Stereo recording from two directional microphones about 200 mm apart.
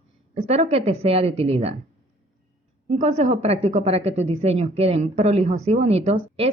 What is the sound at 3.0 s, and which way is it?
A woman's voice, 35° right (ahead or behind).